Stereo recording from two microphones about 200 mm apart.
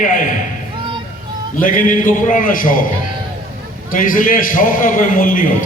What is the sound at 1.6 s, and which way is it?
A man's voice, 45° left (ahead or behind).